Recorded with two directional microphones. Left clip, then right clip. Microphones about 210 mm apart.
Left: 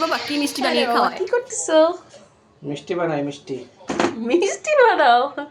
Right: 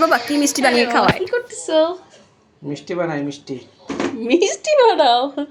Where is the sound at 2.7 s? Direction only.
40° right (ahead or behind).